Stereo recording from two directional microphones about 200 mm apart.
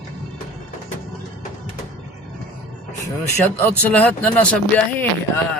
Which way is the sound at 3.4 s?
10° left (ahead or behind).